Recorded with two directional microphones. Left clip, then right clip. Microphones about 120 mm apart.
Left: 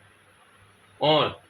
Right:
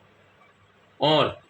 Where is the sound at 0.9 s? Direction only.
50° right (ahead or behind).